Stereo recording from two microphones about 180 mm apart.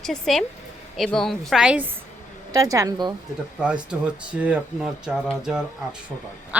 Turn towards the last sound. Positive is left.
turn(degrees=-10)  # may be behind; listen again after turning